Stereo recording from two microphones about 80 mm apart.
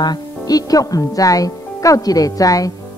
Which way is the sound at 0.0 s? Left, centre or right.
Left.